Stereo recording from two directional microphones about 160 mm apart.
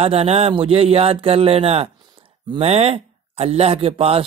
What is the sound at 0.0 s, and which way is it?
Speech, 40° right (ahead or behind).